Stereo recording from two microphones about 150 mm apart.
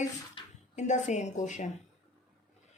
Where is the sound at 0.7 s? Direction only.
50° left (ahead or behind).